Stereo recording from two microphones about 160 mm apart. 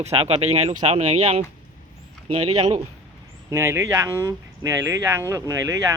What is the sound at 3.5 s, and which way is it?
Speech, 15° right (ahead or behind).